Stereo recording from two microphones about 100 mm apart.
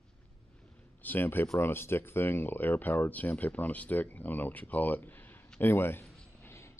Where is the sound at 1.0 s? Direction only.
20° left (ahead or behind).